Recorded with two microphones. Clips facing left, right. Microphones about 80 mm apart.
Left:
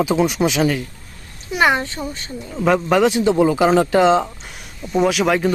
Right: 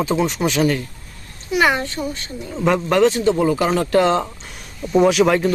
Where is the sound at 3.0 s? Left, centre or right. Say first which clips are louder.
Left 1 dB; centre.